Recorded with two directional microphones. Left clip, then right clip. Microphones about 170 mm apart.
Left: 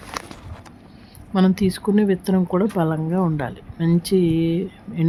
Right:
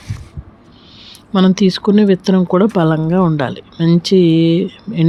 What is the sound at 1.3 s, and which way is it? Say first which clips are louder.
Speech: right 7 dB; 15° right (ahead or behind).